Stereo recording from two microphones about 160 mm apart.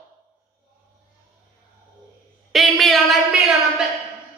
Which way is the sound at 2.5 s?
Centre (ahead or behind).